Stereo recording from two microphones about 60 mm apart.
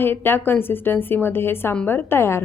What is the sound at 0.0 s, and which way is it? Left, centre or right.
A woman's voice, left.